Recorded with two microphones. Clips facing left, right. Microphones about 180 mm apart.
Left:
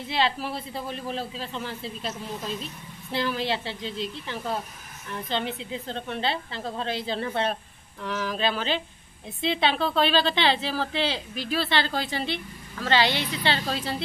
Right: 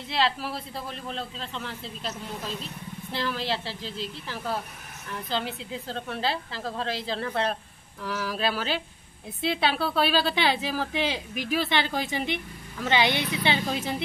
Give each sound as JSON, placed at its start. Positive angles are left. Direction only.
{"t": 0.1, "sound": "a woman's voice", "side_deg": 0}